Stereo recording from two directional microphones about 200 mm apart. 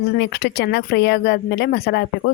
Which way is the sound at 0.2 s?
55° left (ahead or behind).